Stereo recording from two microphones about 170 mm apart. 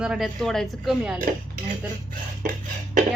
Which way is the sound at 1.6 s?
55° right (ahead or behind).